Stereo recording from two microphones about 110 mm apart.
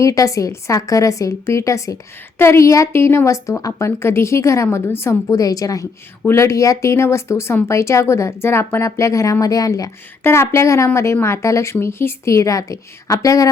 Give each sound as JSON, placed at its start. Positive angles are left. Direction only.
{"t": 0.0, "sound": "speech", "side_deg": 30}